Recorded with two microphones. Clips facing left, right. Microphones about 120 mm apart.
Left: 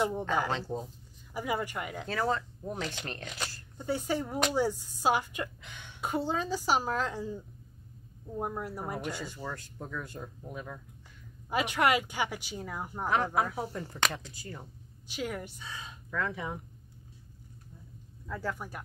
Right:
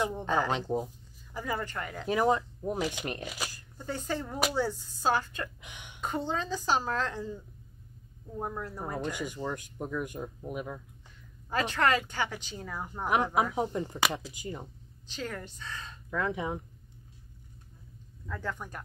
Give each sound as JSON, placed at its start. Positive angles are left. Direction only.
{"t": 0.5, "sound": "speech", "side_deg": -15}
{"t": 1.3, "sound": "speech", "side_deg": 10}
{"t": 2.0, "sound": "speech", "side_deg": -15}
{"t": 3.7, "sound": "speech", "side_deg": 10}
{"t": 5.6, "sound": "a sound", "side_deg": -15}
{"t": 5.9, "sound": "speech", "side_deg": 10}
{"t": 9.1, "sound": "speech", "side_deg": -15}
{"t": 11.5, "sound": "speech", "side_deg": 10}
{"t": 13.0, "sound": "speech", "side_deg": -15}
{"t": 15.0, "sound": "speech", "side_deg": 10}
{"t": 16.1, "sound": "speech", "side_deg": -20}
{"t": 18.2, "sound": "speech", "side_deg": 10}